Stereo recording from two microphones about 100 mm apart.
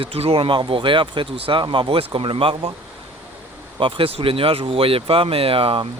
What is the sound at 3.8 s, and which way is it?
Speech, 60° right (ahead or behind).